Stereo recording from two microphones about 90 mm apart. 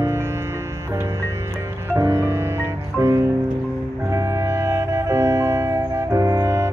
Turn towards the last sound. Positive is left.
turn(degrees=-30)  # may be behind; listen again after turning